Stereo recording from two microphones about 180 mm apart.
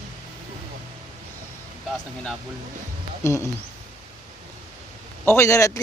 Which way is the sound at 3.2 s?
15° left (ahead or behind).